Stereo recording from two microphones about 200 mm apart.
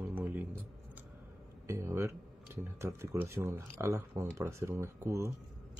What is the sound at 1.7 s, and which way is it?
A man's voice, 15° right (ahead or behind).